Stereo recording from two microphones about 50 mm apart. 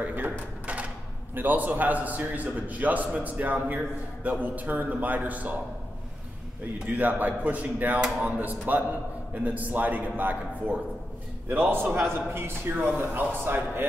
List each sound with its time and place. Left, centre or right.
0.0 s cash register: right
1.3 s a man's voice: right
7.0 s a man's voice: right